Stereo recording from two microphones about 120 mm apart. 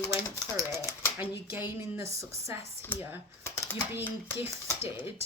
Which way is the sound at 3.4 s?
20° left (ahead or behind).